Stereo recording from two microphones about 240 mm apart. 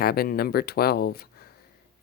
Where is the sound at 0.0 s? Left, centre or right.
Left.